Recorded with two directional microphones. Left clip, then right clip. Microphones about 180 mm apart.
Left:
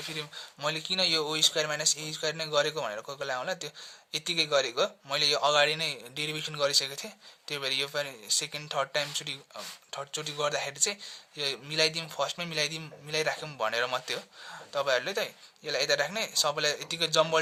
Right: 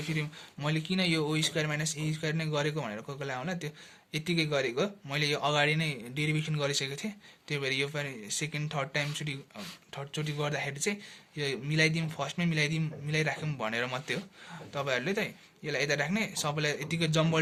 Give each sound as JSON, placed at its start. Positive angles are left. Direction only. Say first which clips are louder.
{"t": 0.2, "sound": "a man's voice", "louder": "left 2 dB", "side_deg": 45}